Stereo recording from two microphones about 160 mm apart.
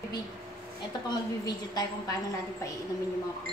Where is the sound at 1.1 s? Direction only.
25° left (ahead or behind).